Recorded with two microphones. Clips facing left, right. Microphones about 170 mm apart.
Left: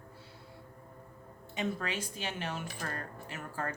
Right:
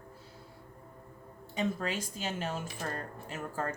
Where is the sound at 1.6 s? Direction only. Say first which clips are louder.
Right 2 dB; 35° right (ahead or behind).